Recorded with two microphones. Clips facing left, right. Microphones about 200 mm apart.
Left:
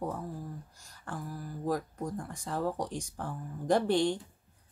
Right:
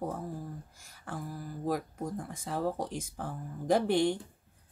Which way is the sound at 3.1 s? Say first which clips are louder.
Even; 5° right (ahead or behind).